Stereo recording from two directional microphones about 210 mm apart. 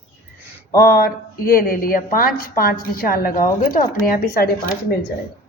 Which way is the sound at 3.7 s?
45° left (ahead or behind).